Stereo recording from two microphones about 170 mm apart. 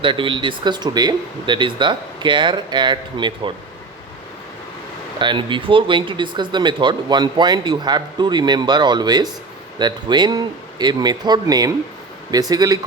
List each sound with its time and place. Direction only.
0.0 s speech: 30° right (ahead or behind)
5.2 s speech: 30° right (ahead or behind)